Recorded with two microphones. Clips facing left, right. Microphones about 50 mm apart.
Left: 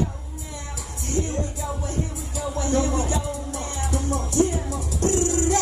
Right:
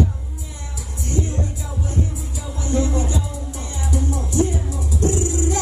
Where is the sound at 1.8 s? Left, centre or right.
Left.